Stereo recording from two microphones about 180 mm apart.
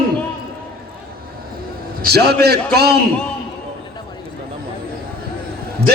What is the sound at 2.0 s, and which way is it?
Speech, 60° right (ahead or behind).